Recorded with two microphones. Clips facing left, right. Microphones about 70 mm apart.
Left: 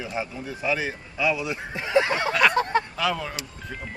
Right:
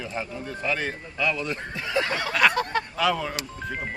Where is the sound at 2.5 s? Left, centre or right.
Left.